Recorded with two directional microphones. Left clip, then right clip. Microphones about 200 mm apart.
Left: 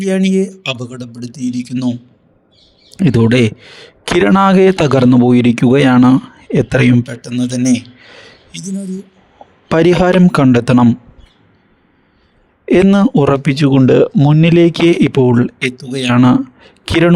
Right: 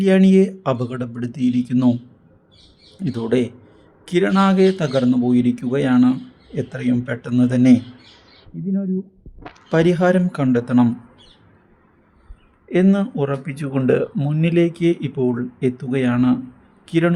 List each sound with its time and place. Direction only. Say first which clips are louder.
0.0 s speech: even; centre (ahead or behind)
0.5 s speech: left 1 dB; 50° left (ahead or behind)
0.8 s speech: right 1 dB; centre (ahead or behind)
1.5 s speech: even; 50° left (ahead or behind)
3.0 s speech: left 9 dB; 50° left (ahead or behind)
7.3 s speech: even; 5° right (ahead or behind)
9.6 s speech: left 6 dB; 50° left (ahead or behind)
12.6 s a man's voice: left 8 dB; 55° left (ahead or behind)